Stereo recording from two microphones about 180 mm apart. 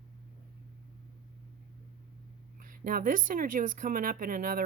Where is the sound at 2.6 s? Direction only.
50° right (ahead or behind).